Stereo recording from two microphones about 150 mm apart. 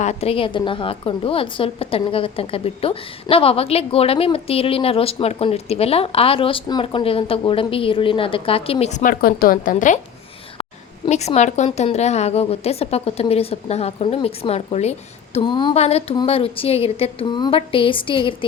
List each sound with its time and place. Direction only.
0.0 s a woman's voice: 45° left (ahead or behind)
10.6 s a woman's voice: 40° left (ahead or behind)
15.7 s a woman's voice: 45° left (ahead or behind)